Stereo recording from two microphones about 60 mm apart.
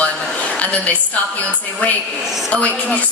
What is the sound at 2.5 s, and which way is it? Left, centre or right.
Speech, left.